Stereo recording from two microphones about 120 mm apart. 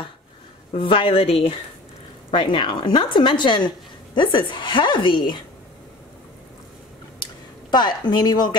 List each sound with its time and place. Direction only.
0.7 s a woman's voice: 45° left (ahead or behind)
2.3 s a woman's voice: 40° left (ahead or behind)
7.7 s a woman's voice: 35° left (ahead or behind)